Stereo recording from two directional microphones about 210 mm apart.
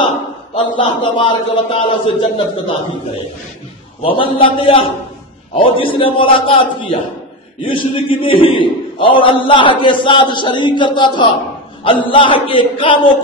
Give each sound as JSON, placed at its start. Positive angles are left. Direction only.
{"t": 0.7, "sound": "a man's voice", "side_deg": 20}
{"t": 4.0, "sound": "a man's voice", "side_deg": 25}